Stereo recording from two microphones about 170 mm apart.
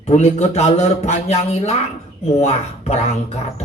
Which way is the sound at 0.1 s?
40° left (ahead or behind).